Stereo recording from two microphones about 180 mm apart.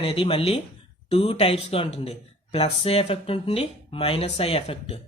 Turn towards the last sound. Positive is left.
turn(degrees=30)  # may be behind; listen again after turning